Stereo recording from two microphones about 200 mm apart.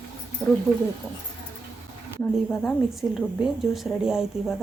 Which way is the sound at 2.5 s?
5° left (ahead or behind).